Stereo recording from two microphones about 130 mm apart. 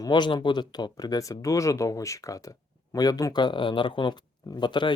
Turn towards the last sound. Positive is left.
turn(degrees=35)  # may be behind; listen again after turning